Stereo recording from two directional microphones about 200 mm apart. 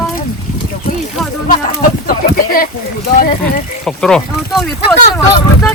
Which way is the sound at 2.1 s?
45° left (ahead or behind).